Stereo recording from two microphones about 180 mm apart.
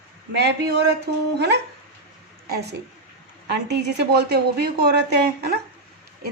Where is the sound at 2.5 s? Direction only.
65° right (ahead or behind).